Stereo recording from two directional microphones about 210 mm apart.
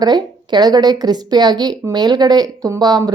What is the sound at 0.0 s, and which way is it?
A woman's voice, 20° right (ahead or behind).